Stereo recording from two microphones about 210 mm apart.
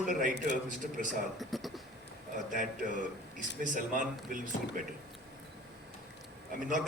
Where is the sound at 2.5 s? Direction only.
40° right (ahead or behind).